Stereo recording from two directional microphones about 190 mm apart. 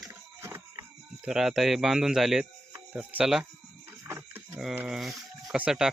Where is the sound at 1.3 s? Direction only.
Centre (ahead or behind).